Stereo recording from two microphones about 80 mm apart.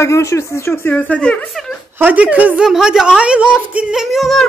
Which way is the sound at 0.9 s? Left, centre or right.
Centre.